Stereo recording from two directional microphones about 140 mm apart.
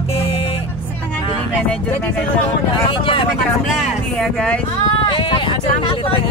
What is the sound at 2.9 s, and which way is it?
Speech, 35° left (ahead or behind).